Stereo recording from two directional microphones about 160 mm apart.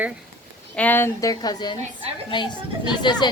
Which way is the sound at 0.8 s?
10° left (ahead or behind).